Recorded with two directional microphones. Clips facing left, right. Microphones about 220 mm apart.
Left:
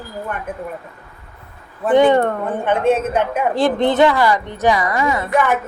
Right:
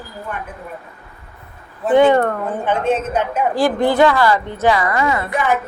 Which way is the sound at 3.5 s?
20° left (ahead or behind).